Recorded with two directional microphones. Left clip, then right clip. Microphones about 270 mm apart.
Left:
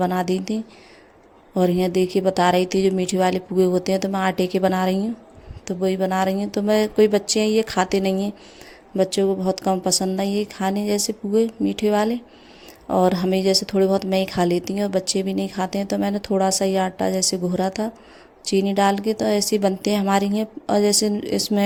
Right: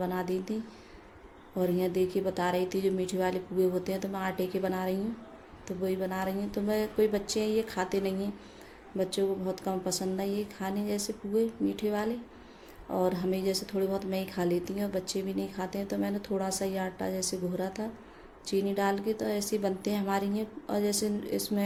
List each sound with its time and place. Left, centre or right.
0.0 s speech: left
1.5 s speech: left